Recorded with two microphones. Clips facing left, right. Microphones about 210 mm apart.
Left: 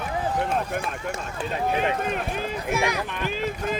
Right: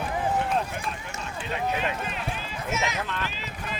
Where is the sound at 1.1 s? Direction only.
45° left (ahead or behind).